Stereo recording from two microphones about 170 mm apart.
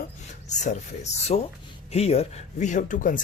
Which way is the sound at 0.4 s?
45° left (ahead or behind).